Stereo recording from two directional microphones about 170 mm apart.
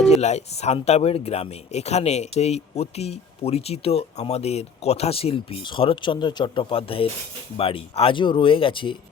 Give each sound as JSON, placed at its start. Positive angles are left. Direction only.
{"t": 0.1, "sound": "speech", "side_deg": 40}